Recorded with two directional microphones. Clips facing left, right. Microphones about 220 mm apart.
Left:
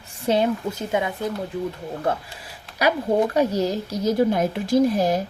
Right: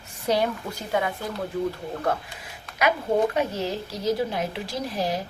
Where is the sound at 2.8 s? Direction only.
35° left (ahead or behind).